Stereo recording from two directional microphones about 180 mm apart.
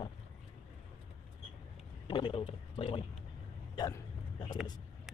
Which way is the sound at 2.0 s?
25° left (ahead or behind).